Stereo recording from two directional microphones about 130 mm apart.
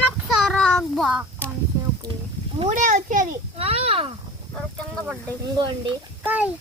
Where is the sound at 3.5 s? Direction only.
50° right (ahead or behind).